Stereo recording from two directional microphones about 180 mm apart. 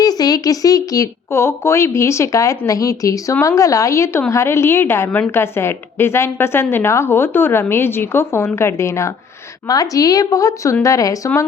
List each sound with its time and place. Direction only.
0.0 s speech: 20° left (ahead or behind)